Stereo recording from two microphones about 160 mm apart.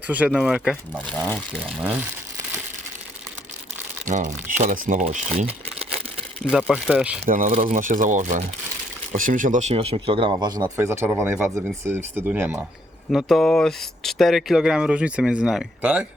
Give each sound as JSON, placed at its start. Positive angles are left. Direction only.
{"t": 0.3, "sound": "speech", "side_deg": -5}
{"t": 1.8, "sound": "speech", "side_deg": -10}
{"t": 4.0, "sound": "speech", "side_deg": -50}
{"t": 6.4, "sound": "speech", "side_deg": -5}
{"t": 7.3, "sound": "speech", "side_deg": -55}
{"t": 7.5, "sound": "speech", "side_deg": -40}
{"t": 7.8, "sound": "speech", "side_deg": -55}
{"t": 13.1, "sound": "speech", "side_deg": 0}